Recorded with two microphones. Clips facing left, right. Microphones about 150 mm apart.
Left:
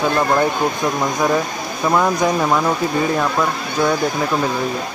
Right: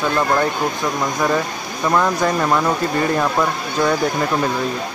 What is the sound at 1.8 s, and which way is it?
Speech, 10° left (ahead or behind).